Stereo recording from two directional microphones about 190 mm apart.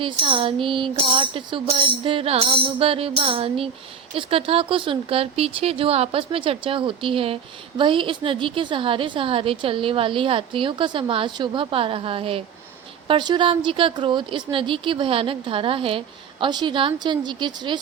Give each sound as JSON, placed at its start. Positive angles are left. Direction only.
{"t": 0.0, "sound": "a woman's voice", "side_deg": -25}